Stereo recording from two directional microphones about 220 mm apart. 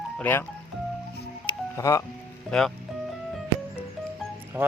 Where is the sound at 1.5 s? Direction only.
15° left (ahead or behind).